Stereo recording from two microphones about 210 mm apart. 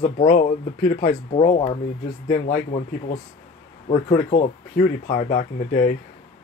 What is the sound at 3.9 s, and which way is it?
Speech, 30° left (ahead or behind).